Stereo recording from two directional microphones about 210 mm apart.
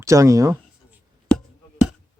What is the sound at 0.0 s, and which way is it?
Speech, 15° right (ahead or behind).